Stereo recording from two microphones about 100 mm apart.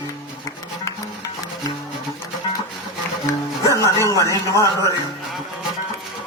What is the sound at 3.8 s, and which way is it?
Music, 35° right (ahead or behind).